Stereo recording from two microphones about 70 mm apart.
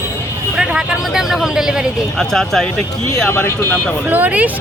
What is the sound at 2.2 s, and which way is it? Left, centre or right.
Speech, centre.